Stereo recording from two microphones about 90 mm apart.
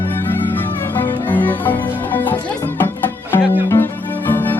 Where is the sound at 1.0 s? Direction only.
20° left (ahead or behind).